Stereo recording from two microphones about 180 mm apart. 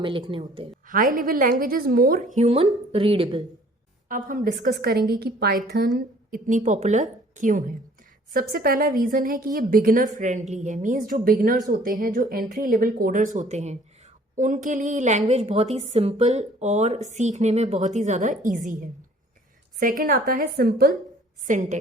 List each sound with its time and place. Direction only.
0.0 s speech: 30° right (ahead or behind)
0.9 s a woman's voice: 50° right (ahead or behind); by 3.4 s 30° right (ahead or behind)
4.1 s a woman's voice: 45° right (ahead or behind)
5.9 s a woman's voice: 45° right (ahead or behind)
21.4 s a woman's voice: 45° right (ahead or behind)